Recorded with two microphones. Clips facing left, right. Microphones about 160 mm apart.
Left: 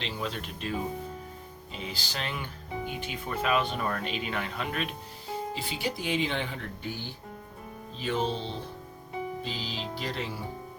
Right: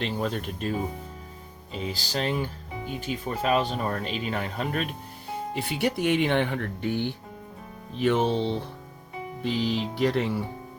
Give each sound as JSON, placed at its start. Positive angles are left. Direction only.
{"t": 0.0, "sound": "speech", "side_deg": -50}
{"t": 1.8, "sound": "speech", "side_deg": -40}
{"t": 5.5, "sound": "speech", "side_deg": -65}